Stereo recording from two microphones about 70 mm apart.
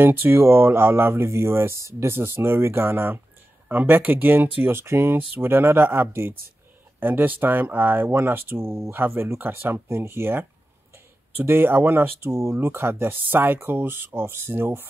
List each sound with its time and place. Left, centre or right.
0.0 s speech: right
3.6 s speech: right